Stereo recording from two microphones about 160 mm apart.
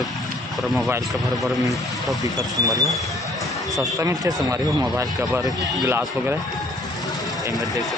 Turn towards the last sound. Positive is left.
turn(degrees=-15)  # may be behind; listen again after turning